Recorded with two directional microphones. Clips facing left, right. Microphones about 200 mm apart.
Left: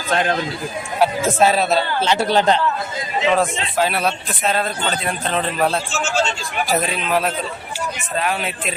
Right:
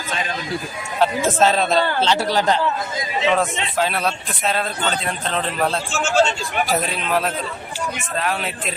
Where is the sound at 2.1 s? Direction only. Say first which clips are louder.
Left 7 dB; 20° left (ahead or behind).